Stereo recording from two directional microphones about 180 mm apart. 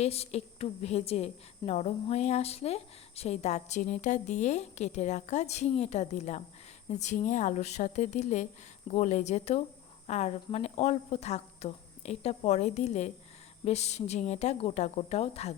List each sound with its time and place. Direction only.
0.0 s a woman's voice: 35° left (ahead or behind)